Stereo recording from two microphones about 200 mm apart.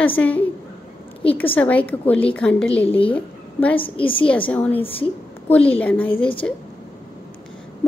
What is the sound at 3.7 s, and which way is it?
Speech, 25° left (ahead or behind).